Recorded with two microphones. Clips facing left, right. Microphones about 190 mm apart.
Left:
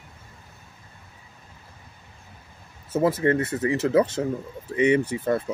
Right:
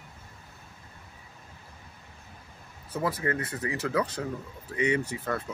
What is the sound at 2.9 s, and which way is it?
Speech, 25° left (ahead or behind).